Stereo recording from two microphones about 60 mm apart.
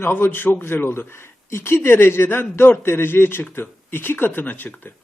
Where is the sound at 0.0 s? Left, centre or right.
Left.